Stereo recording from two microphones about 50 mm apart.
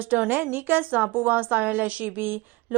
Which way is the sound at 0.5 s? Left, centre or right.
Right.